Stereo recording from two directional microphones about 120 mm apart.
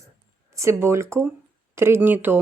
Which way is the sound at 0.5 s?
25° right (ahead or behind).